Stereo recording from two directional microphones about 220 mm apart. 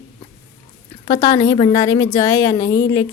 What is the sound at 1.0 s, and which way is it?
A woman's voice, 15° left (ahead or behind).